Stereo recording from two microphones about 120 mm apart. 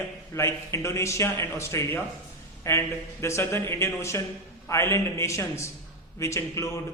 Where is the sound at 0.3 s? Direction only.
25° left (ahead or behind).